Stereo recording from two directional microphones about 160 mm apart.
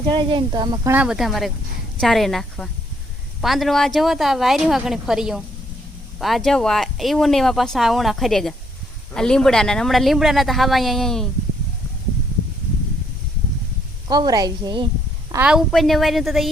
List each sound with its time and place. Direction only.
0.0 s speech: 30° right (ahead or behind)
0.9 s speech: 5° right (ahead or behind)
14.1 s speech: 25° right (ahead or behind)
15.4 s speech: centre (ahead or behind)